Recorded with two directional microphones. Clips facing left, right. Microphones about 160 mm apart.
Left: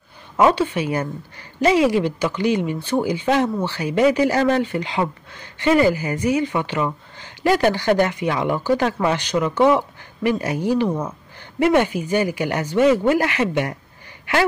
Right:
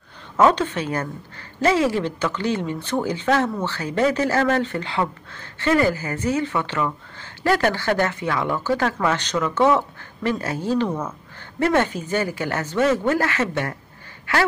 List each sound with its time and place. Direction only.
0.4 s a woman's voice: 10° left (ahead or behind)